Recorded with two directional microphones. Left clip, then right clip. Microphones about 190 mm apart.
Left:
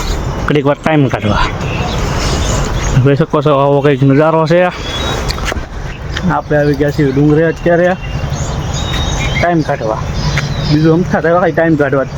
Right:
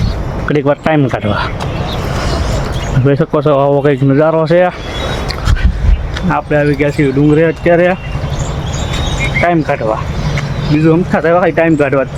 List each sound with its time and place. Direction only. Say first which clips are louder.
0.4 s speech: even; 5° left (ahead or behind)
3.1 s speech: even; 5° left (ahead or behind)
6.3 s speech: even; 5° right (ahead or behind)
9.4 s speech: right 1 dB; 5° right (ahead or behind)